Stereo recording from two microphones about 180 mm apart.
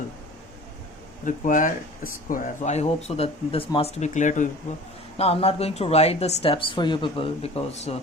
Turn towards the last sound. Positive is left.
turn(degrees=35)  # may be behind; listen again after turning